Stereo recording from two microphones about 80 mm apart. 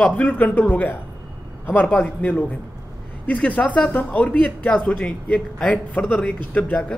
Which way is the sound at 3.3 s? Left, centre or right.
Centre.